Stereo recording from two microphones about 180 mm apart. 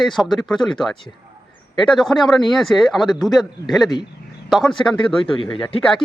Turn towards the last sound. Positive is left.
turn(degrees=30)  # may be behind; listen again after turning